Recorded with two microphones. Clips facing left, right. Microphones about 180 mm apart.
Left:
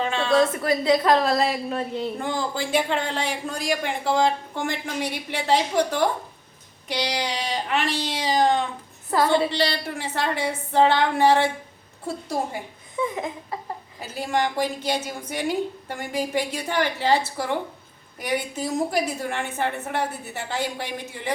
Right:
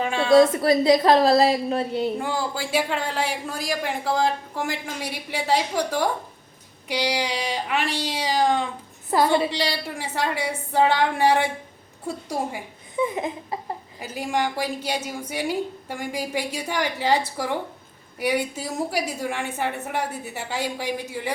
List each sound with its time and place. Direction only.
0.0 s a woman's voice: 10° right (ahead or behind)
0.6 s a woman's voice: 35° right (ahead or behind)
2.1 s a woman's voice: 10° right (ahead or behind)
13.0 s a sound: 20° right (ahead or behind)
14.0 s a woman's voice: 10° right (ahead or behind)